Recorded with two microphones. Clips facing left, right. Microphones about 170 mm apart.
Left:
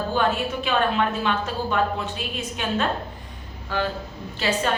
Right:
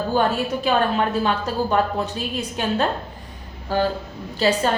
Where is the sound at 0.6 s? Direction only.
40° right (ahead or behind).